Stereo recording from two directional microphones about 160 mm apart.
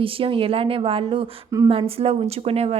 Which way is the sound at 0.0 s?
35° right (ahead or behind).